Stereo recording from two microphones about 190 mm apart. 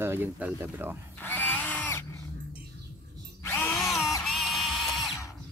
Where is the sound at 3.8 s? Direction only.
Centre (ahead or behind).